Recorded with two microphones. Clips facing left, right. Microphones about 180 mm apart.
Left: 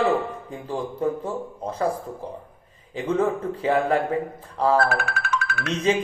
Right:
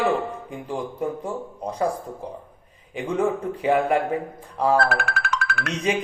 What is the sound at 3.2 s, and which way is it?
Speech, 15° right (ahead or behind).